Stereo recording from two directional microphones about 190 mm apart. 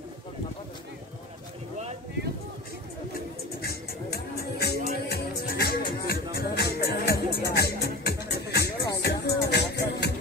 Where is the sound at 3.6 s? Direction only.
55° left (ahead or behind).